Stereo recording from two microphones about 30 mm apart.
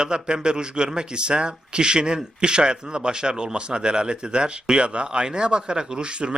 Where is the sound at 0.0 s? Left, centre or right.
Right.